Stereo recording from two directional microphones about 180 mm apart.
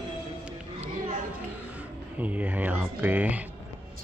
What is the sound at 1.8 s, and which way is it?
Speech, 10° right (ahead or behind).